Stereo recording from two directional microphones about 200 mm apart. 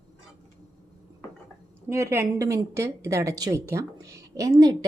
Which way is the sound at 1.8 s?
15° right (ahead or behind).